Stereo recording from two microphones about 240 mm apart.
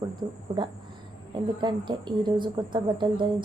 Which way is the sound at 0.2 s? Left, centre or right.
Centre.